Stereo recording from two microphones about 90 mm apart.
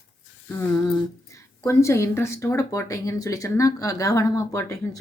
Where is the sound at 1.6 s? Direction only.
35° left (ahead or behind).